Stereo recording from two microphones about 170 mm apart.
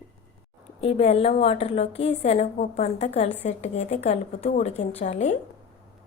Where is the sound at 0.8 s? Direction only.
35° left (ahead or behind).